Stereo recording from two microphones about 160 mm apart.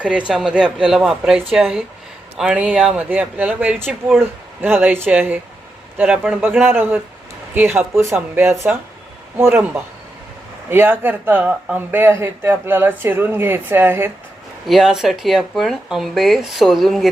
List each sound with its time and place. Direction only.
0.0 s speech: 5° right (ahead or behind)
14.7 s speech: centre (ahead or behind)